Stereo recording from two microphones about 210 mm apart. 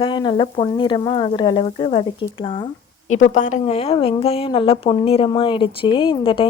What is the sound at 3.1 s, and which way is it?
A woman's voice, 35° left (ahead or behind).